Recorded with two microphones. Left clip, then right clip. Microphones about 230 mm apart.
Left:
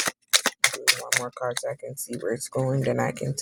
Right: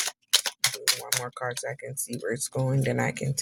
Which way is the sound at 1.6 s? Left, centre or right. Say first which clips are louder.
Left 3 dB; right.